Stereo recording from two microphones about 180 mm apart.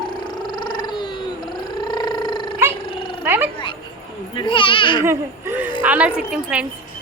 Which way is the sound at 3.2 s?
10° right (ahead or behind).